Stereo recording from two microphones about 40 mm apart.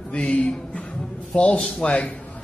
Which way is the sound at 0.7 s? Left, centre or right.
Left.